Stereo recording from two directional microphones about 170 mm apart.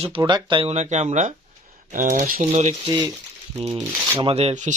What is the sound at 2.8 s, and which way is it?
Speech, 20° right (ahead or behind).